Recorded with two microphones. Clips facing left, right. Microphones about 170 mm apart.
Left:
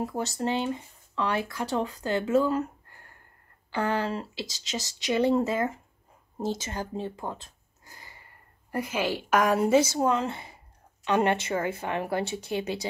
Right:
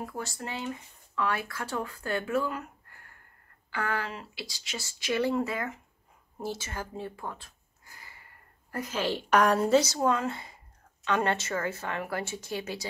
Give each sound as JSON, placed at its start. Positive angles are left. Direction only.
{"t": 0.0, "sound": "speech", "side_deg": 25}
{"t": 8.7, "sound": "a woman's voice", "side_deg": 10}
{"t": 9.9, "sound": "speech", "side_deg": 20}